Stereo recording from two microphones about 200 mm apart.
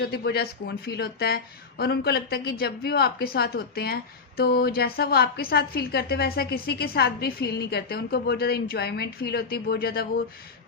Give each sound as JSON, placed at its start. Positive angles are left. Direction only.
{"t": 0.0, "sound": "a woman's voice", "side_deg": 50}